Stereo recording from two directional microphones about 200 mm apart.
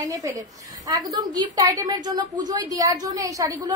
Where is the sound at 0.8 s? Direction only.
20° right (ahead or behind).